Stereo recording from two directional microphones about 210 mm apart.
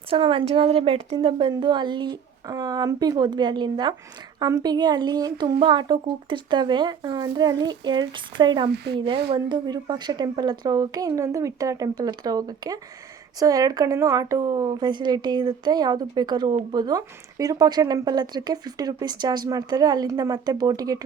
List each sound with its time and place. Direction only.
0.1 s speech: 25° right (ahead or behind)
8.7 s speech: 50° right (ahead or behind)
9.3 s speech: 20° right (ahead or behind)